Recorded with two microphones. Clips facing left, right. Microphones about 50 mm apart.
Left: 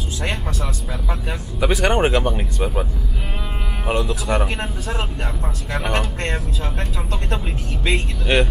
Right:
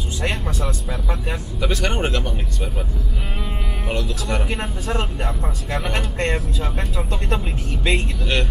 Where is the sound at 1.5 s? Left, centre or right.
Centre.